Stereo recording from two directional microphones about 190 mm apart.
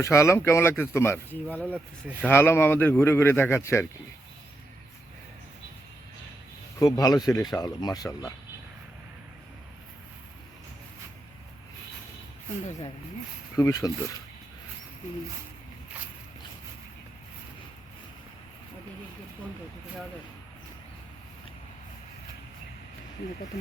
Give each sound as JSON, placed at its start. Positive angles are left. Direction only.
{"t": 0.0, "sound": "speech", "side_deg": 15}
{"t": 1.6, "sound": "speech", "side_deg": -10}
{"t": 2.2, "sound": "speech", "side_deg": 10}
{"t": 6.7, "sound": "speech", "side_deg": 20}
{"t": 13.6, "sound": "speech", "side_deg": 20}